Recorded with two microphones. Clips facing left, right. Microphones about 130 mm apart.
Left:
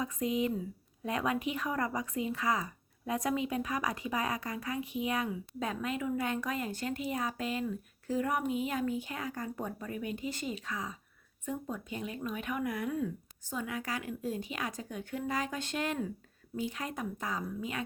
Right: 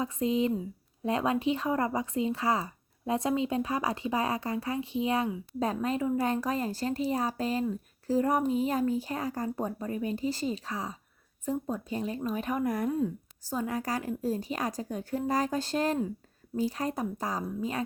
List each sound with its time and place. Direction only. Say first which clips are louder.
0.0 s speech: right 4 dB; 30° right (ahead or behind)